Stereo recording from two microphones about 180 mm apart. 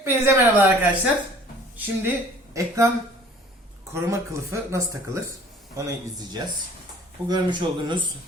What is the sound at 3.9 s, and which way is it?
Speech, 15° right (ahead or behind).